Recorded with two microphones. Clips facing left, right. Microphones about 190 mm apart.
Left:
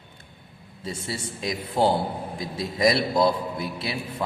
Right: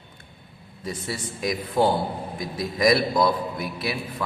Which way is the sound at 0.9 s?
25° left (ahead or behind).